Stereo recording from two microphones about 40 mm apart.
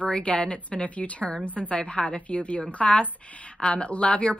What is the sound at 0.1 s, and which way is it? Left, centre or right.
A woman's voice, left.